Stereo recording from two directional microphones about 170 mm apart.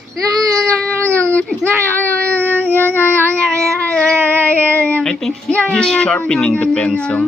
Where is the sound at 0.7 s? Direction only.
5° left (ahead or behind).